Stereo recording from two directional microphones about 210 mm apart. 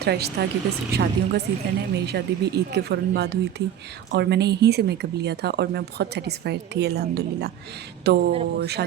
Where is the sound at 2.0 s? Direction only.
55° right (ahead or behind).